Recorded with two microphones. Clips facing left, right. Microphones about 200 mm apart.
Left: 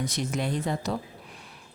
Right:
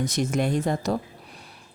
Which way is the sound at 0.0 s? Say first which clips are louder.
Right 5 dB; 45° right (ahead or behind).